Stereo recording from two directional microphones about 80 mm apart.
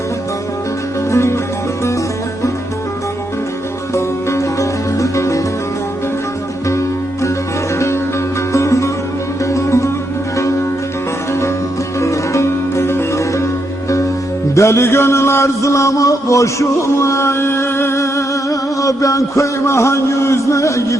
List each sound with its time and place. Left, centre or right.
1.1 s music: left
3.9 s music: left
6.7 s music: left
8.5 s music: left
11.9 s music: left
14.5 s music: left